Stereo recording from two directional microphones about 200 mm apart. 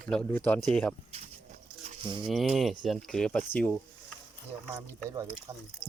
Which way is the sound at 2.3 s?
Centre (ahead or behind).